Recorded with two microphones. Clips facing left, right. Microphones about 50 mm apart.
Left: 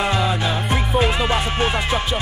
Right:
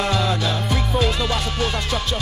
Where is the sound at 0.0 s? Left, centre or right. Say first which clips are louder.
Left 1 dB; centre.